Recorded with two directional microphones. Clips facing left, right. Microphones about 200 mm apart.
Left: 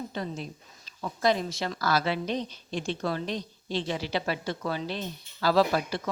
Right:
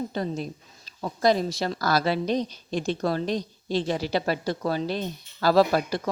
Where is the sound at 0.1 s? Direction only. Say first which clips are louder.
Right 5 dB; 40° right (ahead or behind).